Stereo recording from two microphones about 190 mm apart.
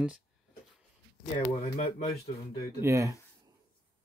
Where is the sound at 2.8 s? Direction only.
15° right (ahead or behind).